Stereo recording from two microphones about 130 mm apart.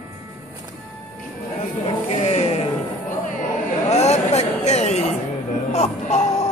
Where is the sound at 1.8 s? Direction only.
55° left (ahead or behind).